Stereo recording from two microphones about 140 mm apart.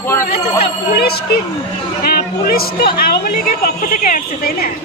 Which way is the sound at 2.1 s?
90° left.